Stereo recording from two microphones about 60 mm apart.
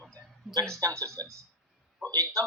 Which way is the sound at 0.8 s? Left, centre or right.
Right.